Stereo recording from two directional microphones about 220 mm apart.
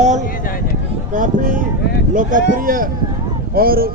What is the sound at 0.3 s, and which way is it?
Speech, 40° left (ahead or behind).